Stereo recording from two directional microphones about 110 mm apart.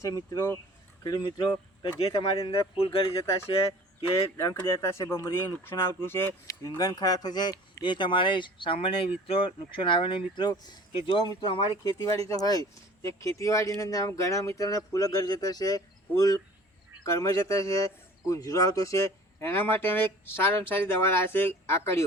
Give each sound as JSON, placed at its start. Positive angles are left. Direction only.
{"t": 0.3, "sound": "a man's voice", "side_deg": 25}
{"t": 1.0, "sound": "speech", "side_deg": 40}
{"t": 2.0, "sound": "speech", "side_deg": 60}
{"t": 4.4, "sound": "a man's voice", "side_deg": 25}
{"t": 6.7, "sound": "speech", "side_deg": 35}
{"t": 12.3, "sound": "a man's voice", "side_deg": 35}